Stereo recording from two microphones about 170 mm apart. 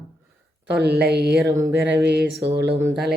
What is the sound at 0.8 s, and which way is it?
Speech, 75° right (ahead or behind).